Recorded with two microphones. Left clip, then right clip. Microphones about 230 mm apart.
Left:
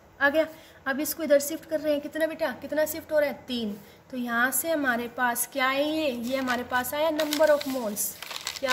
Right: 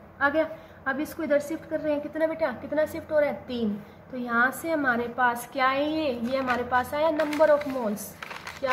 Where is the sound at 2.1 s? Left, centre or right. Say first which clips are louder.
Right 1 dB; left.